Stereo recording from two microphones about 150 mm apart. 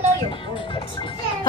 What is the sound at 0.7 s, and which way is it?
Music, 30° left (ahead or behind).